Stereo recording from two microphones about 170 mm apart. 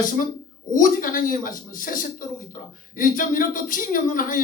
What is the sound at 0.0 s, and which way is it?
Speech, 50° left (ahead or behind).